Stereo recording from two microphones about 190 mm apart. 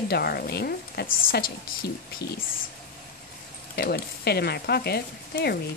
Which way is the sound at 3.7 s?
55° left (ahead or behind).